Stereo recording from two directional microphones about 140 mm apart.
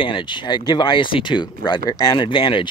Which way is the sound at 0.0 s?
35° left (ahead or behind).